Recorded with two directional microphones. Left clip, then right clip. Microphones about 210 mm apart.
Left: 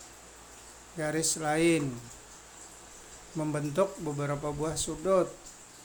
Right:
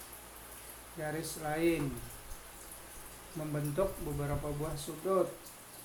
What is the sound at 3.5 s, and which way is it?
Speech, 55° left (ahead or behind).